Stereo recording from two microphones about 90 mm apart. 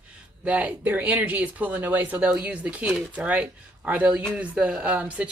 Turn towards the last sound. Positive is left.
turn(degrees=-15)  # may be behind; listen again after turning